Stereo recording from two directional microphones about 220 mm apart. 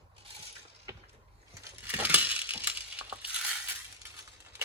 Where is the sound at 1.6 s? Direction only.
10° right (ahead or behind).